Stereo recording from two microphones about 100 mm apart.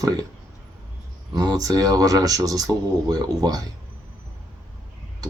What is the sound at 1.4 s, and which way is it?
Speech, 40° right (ahead or behind).